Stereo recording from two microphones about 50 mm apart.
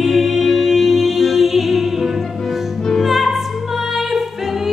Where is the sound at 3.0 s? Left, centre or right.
Centre.